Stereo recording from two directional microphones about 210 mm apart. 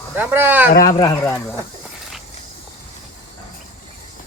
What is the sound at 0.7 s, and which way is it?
Speech, 40° left (ahead or behind).